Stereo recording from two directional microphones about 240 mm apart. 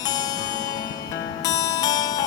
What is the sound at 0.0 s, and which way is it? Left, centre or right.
Music, centre.